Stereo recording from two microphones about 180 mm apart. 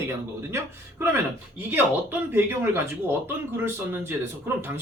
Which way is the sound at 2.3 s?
10° right (ahead or behind).